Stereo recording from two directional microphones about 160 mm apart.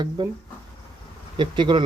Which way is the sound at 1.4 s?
30° right (ahead or behind).